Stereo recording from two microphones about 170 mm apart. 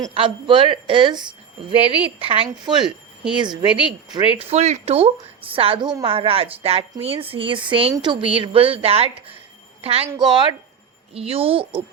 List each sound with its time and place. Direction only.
0.0 s a woman's voice: 30° right (ahead or behind)
2.6 s speech: 5° right (ahead or behind)
3.3 s a woman's voice: 25° right (ahead or behind)